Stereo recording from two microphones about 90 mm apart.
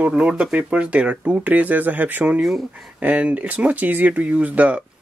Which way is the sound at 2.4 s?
Centre (ahead or behind).